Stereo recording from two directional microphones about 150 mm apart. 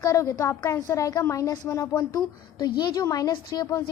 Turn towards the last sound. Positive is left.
turn(degrees=25)  # may be behind; listen again after turning